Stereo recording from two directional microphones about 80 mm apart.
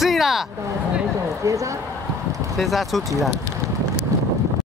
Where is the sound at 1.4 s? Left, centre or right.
Right.